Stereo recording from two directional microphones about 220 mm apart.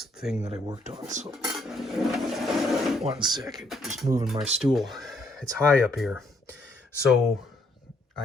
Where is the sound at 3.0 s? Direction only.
20° right (ahead or behind).